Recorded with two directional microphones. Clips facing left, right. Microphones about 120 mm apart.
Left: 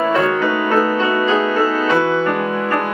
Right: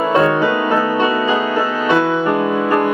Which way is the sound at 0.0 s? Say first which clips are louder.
Right 2 dB; 20° right (ahead or behind).